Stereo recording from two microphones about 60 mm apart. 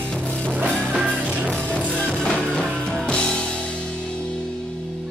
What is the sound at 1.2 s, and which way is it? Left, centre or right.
Music, right.